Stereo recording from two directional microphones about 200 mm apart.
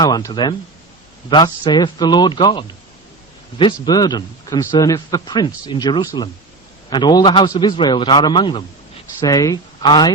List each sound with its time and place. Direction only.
0.0 s speech: 20° left (ahead or behind)